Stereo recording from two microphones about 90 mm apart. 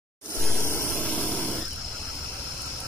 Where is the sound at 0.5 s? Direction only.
25° left (ahead or behind).